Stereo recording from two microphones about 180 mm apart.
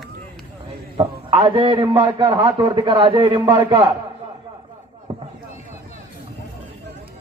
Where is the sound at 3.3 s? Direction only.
15° right (ahead or behind).